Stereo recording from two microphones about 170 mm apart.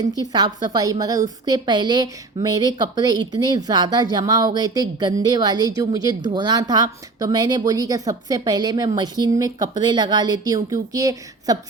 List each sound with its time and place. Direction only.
0.0 s a woman's voice: 25° right (ahead or behind)